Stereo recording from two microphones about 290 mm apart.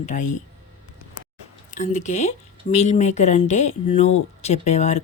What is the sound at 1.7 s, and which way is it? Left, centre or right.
Speech, left.